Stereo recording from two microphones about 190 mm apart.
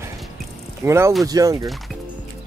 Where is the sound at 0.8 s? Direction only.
15° right (ahead or behind).